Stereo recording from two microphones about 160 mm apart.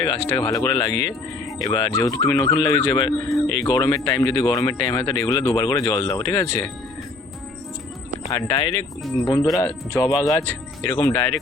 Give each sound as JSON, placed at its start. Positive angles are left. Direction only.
{"t": 0.0, "sound": "speech", "side_deg": 20}
{"t": 8.3, "sound": "speech", "side_deg": 20}